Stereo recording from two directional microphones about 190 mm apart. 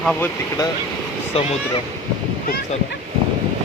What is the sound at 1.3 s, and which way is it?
Speech, 30° left (ahead or behind).